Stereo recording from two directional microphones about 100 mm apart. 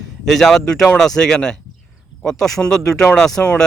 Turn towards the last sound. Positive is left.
turn(degrees=5)  # may be behind; listen again after turning